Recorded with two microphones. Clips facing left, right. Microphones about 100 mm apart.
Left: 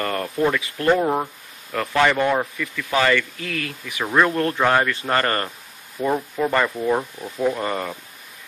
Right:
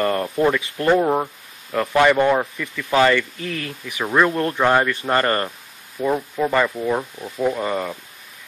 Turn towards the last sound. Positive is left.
turn(degrees=-5)  # may be behind; listen again after turning